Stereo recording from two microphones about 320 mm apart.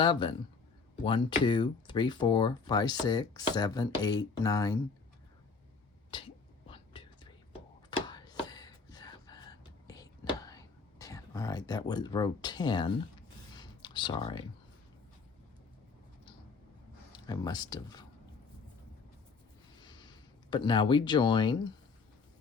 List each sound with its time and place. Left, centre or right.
0.0 s speech: centre
6.1 s whispering: centre
7.9 s a sound: centre
13.6 s computer keyboard: centre
17.1 s speech: centre
19.8 s a sound: centre
20.5 s speech: centre